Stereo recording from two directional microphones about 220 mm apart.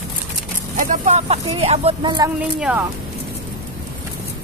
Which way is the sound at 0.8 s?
35° right (ahead or behind).